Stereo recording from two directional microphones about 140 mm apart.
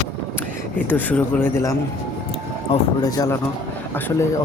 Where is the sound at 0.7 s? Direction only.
10° left (ahead or behind).